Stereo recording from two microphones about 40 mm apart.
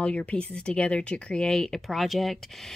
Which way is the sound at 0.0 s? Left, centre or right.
Left.